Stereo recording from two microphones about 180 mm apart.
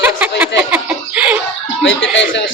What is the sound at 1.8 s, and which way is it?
Speech, 90° left.